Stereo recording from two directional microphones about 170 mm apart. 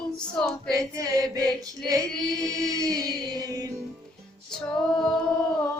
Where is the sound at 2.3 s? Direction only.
20° right (ahead or behind).